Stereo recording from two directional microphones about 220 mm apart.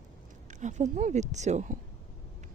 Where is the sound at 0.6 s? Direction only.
35° right (ahead or behind).